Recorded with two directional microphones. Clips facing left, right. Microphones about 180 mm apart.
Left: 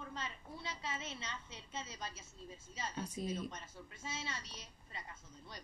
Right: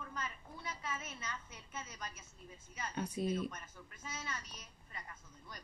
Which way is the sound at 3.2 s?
60° right (ahead or behind).